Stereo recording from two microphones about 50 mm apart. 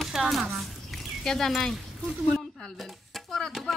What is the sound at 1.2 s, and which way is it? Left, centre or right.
Speech, centre.